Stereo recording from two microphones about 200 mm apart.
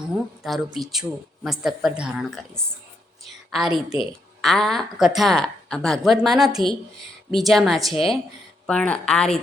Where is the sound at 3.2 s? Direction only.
Centre (ahead or behind).